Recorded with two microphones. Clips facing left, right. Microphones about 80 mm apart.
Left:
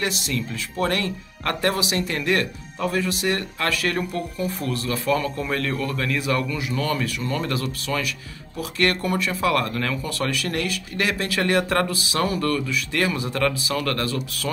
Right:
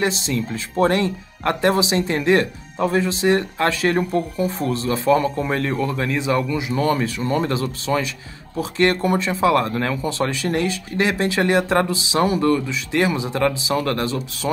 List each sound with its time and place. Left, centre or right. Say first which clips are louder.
0.0 s speech: right 4 dB; right